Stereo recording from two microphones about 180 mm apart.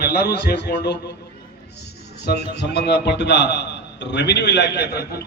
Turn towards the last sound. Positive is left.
turn(degrees=65)  # may be behind; listen again after turning